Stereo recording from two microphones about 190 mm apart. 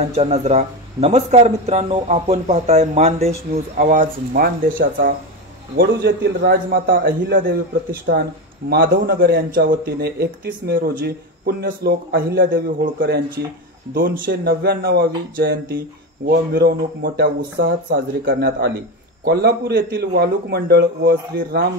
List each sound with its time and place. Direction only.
0.1 s a man's voice: 35° right (ahead or behind); by 21.6 s 50° right (ahead or behind)